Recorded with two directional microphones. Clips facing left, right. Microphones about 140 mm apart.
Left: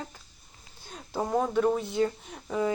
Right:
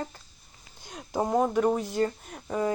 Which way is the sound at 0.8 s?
10° right (ahead or behind).